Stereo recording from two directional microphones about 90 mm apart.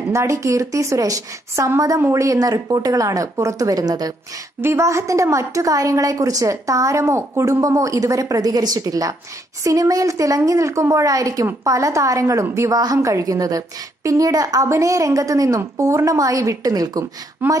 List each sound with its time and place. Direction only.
0.1 s a woman's voice: 35° right (ahead or behind)
2.0 s speech: 25° right (ahead or behind)
2.2 s a woman's voice: 45° right (ahead or behind)
4.6 s a woman's voice: 30° right (ahead or behind); by 17.0 s 45° right (ahead or behind)
17.4 s speech: 20° right (ahead or behind)